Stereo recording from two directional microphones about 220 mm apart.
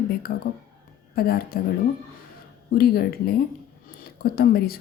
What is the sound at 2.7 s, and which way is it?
A woman's voice, 45° left (ahead or behind).